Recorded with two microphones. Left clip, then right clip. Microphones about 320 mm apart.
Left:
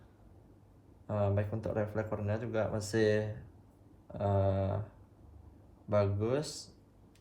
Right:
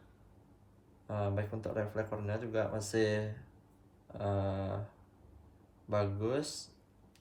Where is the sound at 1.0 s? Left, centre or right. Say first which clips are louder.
Left 4 dB; left.